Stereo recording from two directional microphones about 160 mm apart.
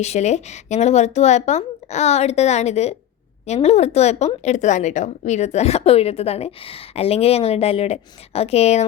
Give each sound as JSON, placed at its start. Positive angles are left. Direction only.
{"t": 0.0, "sound": "a woman's voice", "side_deg": 45}